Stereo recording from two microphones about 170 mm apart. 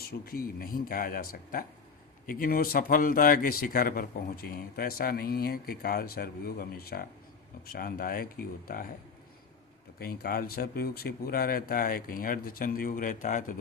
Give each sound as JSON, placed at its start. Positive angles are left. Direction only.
{"t": 0.3, "sound": "speech", "side_deg": 60}
{"t": 10.0, "sound": "speech", "side_deg": 65}